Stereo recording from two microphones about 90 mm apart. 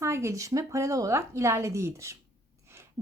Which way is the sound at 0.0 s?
30° right (ahead or behind).